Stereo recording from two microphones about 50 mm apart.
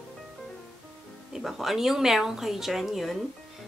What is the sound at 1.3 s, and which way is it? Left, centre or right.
Speech, centre.